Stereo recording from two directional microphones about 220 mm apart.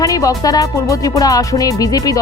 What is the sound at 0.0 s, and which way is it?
Speech, 15° left (ahead or behind).